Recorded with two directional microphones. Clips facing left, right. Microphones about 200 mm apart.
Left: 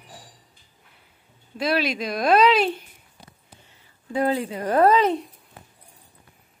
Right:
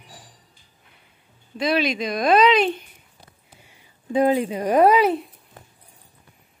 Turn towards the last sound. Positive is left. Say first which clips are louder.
# right 2 dB
turn(degrees=-5)  # may be behind; listen again after turning